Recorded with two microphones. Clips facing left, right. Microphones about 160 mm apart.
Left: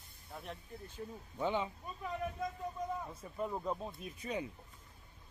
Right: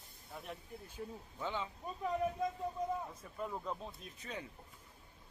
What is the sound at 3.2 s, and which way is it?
Speech, 5° left (ahead or behind).